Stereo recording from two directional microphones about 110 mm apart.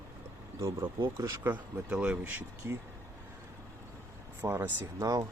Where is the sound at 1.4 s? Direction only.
10° right (ahead or behind).